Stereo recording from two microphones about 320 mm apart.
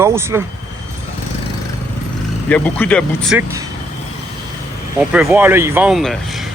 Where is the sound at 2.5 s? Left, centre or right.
Centre.